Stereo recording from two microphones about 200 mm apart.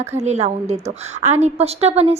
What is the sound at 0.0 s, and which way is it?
A woman's voice, 35° right (ahead or behind).